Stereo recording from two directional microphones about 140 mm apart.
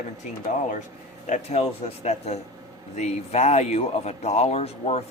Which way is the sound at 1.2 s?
55° left (ahead or behind).